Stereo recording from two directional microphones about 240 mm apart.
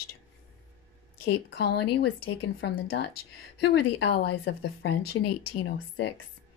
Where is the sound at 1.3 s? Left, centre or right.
Left.